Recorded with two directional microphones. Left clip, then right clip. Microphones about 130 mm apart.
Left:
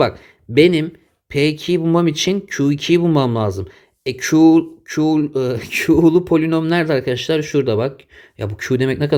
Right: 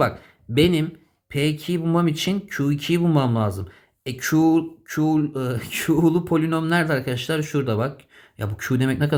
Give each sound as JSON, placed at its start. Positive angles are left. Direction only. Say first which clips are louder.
{"t": 0.5, "sound": "speech", "louder": "left 7 dB", "side_deg": 50}
{"t": 1.3, "sound": "speech", "louder": "left 7 dB", "side_deg": 65}
{"t": 4.4, "sound": "speech", "louder": "left 7 dB", "side_deg": 45}
{"t": 5.3, "sound": "speech", "louder": "left 8 dB", "side_deg": 65}